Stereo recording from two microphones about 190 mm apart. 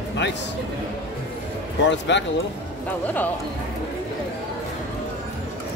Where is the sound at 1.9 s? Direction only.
70° left (ahead or behind).